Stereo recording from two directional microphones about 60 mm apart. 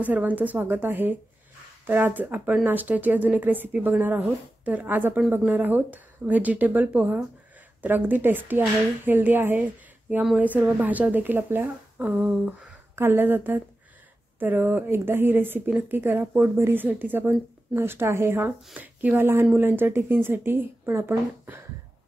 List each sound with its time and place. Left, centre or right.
0.0 s a woman's voice: right
16.4 s a woman's voice: right
18.8 s a woman's voice: right
21.0 s a woman's voice: right